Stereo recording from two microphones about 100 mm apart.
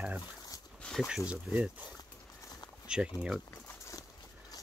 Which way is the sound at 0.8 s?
5° left (ahead or behind).